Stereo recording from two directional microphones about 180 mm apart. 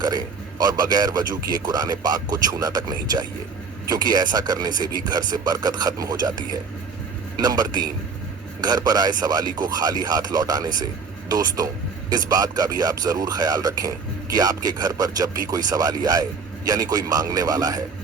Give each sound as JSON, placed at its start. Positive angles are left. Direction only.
{"t": 0.0, "sound": "a man's voice", "side_deg": -20}